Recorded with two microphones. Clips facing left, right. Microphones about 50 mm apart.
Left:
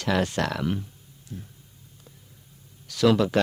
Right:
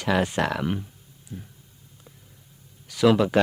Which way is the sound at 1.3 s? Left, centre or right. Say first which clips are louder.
Even; centre.